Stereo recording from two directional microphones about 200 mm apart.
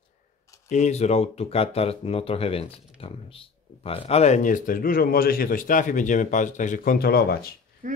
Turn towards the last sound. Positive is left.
turn(degrees=-40)  # may be behind; listen again after turning